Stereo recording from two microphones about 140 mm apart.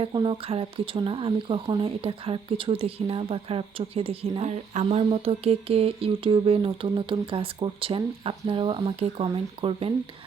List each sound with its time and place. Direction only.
0.0 s speech: 35° right (ahead or behind)